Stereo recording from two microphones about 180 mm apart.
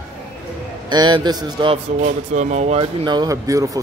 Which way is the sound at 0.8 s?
25° right (ahead or behind).